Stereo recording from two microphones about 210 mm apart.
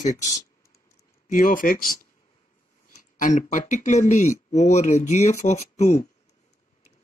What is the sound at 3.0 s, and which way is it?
A man's voice, 35° left (ahead or behind).